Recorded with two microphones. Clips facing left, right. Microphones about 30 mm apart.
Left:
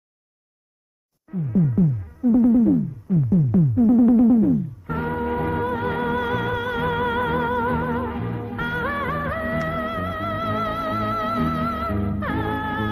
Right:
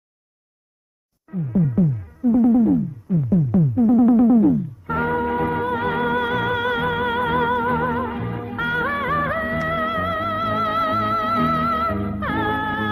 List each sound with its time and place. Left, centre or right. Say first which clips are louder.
1.3 s music: even; centre
9.7 s music: right 4 dB; centre